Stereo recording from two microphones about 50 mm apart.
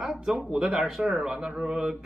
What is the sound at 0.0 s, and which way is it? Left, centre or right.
Speech, centre.